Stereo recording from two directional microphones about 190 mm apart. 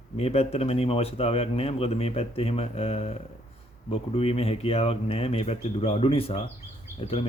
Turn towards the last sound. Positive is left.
turn(degrees=30)  # may be behind; listen again after turning